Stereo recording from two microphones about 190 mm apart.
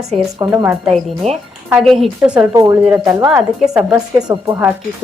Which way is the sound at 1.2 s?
35° right (ahead or behind).